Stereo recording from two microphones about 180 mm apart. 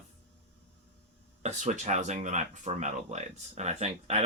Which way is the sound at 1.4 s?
40° right (ahead or behind).